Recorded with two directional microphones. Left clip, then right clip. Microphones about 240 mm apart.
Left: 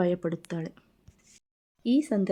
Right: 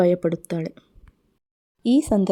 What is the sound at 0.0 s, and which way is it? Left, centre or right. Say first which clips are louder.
Speech: right 9 dB; right.